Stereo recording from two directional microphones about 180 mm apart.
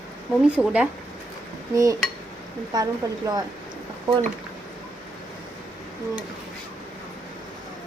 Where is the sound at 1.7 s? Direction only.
20° right (ahead or behind).